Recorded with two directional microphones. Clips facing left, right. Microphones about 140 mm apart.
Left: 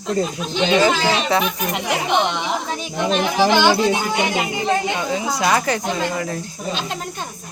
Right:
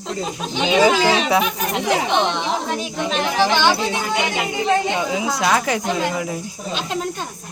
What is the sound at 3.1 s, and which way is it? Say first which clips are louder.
Speech: left 2 dB; 10° left (ahead or behind).